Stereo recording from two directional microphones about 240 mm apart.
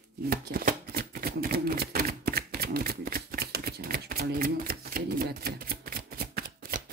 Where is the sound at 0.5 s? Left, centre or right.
Right.